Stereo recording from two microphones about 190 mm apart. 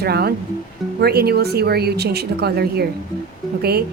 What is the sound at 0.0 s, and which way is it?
A woman's voice, 55° right (ahead or behind).